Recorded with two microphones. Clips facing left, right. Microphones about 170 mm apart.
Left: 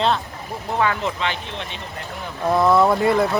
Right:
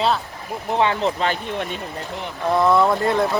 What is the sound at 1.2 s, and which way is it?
Speech, 45° right (ahead or behind).